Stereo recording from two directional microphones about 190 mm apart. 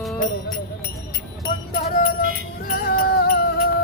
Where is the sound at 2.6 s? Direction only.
50° left (ahead or behind).